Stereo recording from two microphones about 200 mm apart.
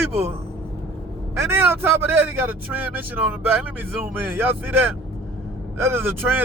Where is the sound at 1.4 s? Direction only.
10° right (ahead or behind).